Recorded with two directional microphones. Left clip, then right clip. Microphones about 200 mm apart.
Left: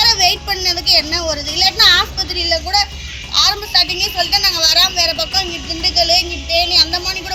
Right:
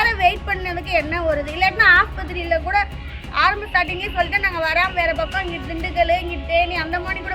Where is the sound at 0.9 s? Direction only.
5° left (ahead or behind).